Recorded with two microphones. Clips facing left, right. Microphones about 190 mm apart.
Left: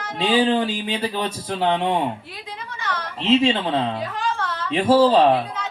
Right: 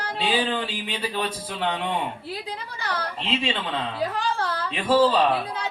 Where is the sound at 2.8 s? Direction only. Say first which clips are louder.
Left 1 dB; 35° right (ahead or behind).